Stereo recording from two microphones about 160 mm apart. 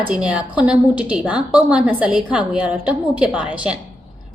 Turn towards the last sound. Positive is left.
turn(degrees=-5)  # may be behind; listen again after turning